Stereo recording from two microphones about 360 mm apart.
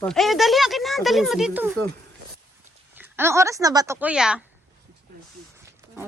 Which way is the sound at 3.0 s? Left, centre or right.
Centre.